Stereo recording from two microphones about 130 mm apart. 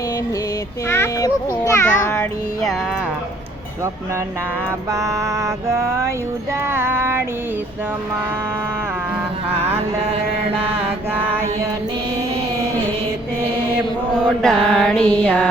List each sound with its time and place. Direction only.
0.9 s a sound: 20° left (ahead or behind)
4.9 s music: 25° right (ahead or behind)
9.5 s mantra: 50° right (ahead or behind)
11.3 s music: 20° right (ahead or behind)
14.3 s mantra: 5° left (ahead or behind)